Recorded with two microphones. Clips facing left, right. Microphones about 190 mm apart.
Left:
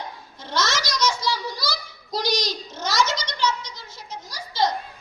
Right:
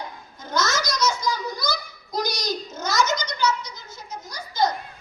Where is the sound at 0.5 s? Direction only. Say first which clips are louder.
Right 1 dB; 90° left.